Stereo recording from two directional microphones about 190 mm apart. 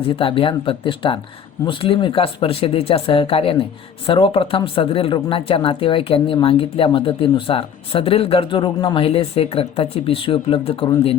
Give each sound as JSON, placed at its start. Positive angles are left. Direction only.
{"t": 0.2, "sound": "speech", "side_deg": 25}